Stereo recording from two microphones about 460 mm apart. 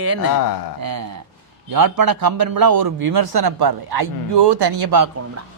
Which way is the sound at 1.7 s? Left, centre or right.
Right.